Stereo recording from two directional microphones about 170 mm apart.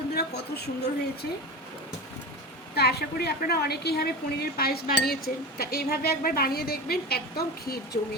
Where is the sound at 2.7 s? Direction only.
70° left (ahead or behind).